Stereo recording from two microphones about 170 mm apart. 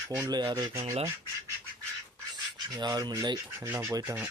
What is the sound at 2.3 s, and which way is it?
Rub, 25° right (ahead or behind).